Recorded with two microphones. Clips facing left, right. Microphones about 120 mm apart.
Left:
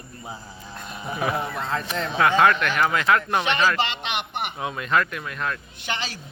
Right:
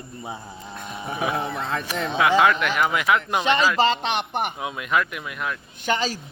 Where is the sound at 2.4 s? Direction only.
15° right (ahead or behind).